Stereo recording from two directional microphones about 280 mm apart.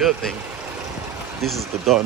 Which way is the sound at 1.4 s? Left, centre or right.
Centre.